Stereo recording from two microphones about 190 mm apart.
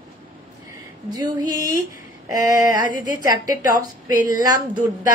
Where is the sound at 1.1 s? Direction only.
20° right (ahead or behind).